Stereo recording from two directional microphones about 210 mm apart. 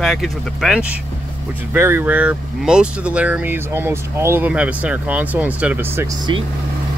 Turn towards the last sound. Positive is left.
turn(degrees=-20)  # may be behind; listen again after turning